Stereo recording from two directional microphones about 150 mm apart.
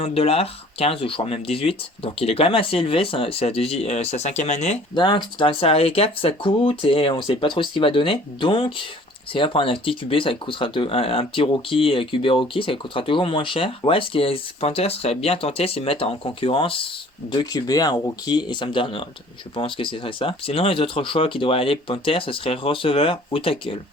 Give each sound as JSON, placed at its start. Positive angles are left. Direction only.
{"t": 0.0, "sound": "speech", "side_deg": 40}
{"t": 4.9, "sound": "speech", "side_deg": 35}
{"t": 17.3, "sound": "speech", "side_deg": 25}